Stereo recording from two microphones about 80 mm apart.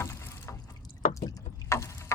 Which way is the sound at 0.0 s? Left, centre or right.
Left.